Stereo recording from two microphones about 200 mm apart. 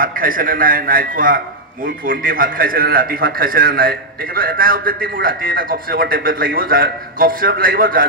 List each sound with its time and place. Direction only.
0.0 s a man's voice: 45° right (ahead or behind)